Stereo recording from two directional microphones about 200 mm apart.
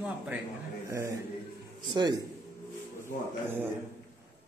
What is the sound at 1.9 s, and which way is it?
Speech, 20° right (ahead or behind).